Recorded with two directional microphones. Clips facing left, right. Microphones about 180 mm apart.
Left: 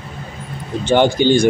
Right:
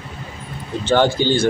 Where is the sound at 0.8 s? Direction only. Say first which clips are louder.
Left 3 dB; 15° left (ahead or behind).